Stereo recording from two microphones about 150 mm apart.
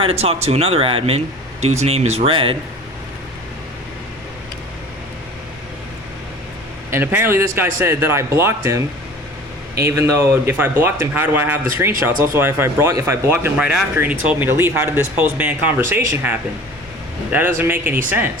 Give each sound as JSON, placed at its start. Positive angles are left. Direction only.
{"t": 0.0, "sound": "speech", "side_deg": -40}
{"t": 6.9, "sound": "speech", "side_deg": -15}
{"t": 9.8, "sound": "speech", "side_deg": -20}